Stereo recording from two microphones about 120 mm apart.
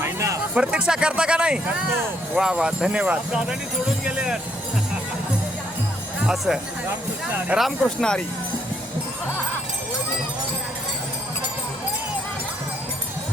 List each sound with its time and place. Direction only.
0.0 s music: 25° right (ahead or behind)
0.5 s speech: 10° right (ahead or behind)
6.2 s speech: centre (ahead or behind)
7.3 s speech: 15° right (ahead or behind)
7.6 s speech: 5° left (ahead or behind)